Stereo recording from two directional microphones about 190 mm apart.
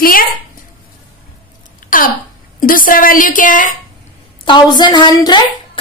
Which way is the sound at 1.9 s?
45° left (ahead or behind).